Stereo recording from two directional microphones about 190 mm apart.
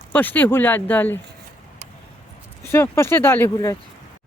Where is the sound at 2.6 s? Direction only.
15° left (ahead or behind).